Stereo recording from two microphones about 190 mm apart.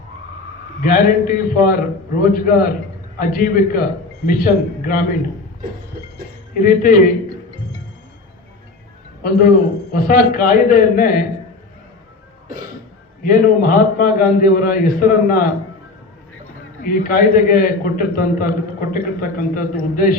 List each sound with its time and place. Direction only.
0.8 s a man's voice: 50° left (ahead or behind)
6.5 s a man's voice: 50° left (ahead or behind)
9.9 s a man's voice: 50° left (ahead or behind)
13.2 s a man's voice: 50° left (ahead or behind)
16.8 s a man's voice: 45° left (ahead or behind)